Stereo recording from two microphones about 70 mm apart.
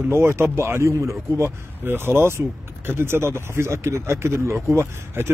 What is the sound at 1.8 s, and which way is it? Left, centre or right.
Speech, right.